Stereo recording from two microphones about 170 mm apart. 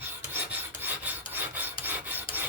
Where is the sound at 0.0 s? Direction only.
10° right (ahead or behind).